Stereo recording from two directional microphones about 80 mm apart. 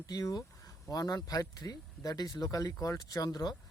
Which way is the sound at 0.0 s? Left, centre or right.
Left.